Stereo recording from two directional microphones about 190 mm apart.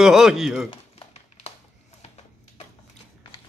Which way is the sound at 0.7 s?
30° left (ahead or behind).